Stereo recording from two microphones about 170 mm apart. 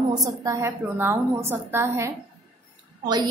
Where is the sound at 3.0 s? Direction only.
25° right (ahead or behind).